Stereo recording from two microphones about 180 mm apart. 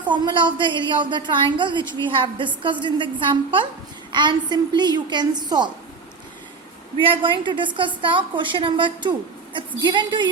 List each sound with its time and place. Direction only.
0.0 s a woman's voice: 25° right (ahead or behind)
4.1 s a woman's voice: 25° right (ahead or behind)
7.0 s a woman's voice: 30° right (ahead or behind)